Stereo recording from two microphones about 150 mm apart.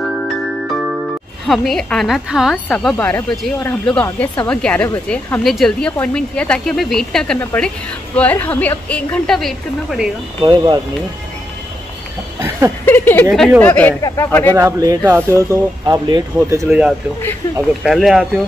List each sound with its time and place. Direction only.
1.5 s a woman's voice: centre (ahead or behind)
10.4 s speech: 30° right (ahead or behind)
12.4 s a sound: 20° right (ahead or behind)
12.8 s a woman's voice: 15° left (ahead or behind)
14.5 s speech: 25° right (ahead or behind)
16.6 s a man's voice: 10° right (ahead or behind)